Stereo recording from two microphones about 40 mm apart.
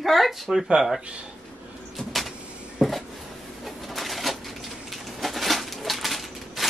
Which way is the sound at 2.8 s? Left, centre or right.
Centre.